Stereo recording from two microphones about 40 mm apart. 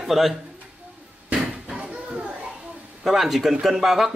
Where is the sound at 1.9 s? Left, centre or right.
Right.